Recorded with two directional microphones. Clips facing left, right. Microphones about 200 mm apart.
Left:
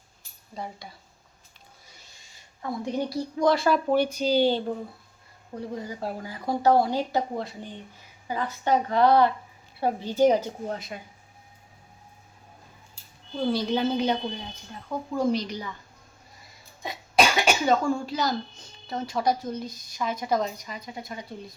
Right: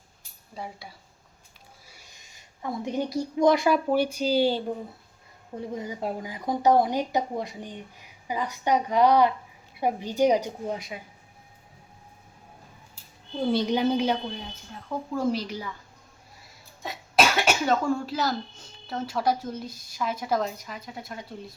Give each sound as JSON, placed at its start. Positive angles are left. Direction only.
{"t": 0.5, "sound": "speech", "side_deg": -5}
{"t": 5.5, "sound": "speech", "side_deg": -20}
{"t": 13.5, "sound": "speech", "side_deg": -20}
{"t": 15.2, "sound": "a woman's voice", "side_deg": -5}
{"t": 16.8, "sound": "cough", "side_deg": 0}
{"t": 18.9, "sound": "a woman's voice", "side_deg": -5}